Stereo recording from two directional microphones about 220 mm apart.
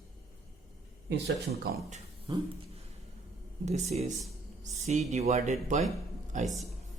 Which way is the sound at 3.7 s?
30° right (ahead or behind).